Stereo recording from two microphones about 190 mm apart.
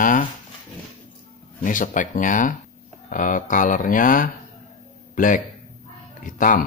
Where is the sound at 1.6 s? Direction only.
45° left (ahead or behind).